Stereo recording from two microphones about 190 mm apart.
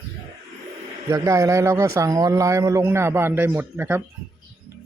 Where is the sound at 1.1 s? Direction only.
15° right (ahead or behind).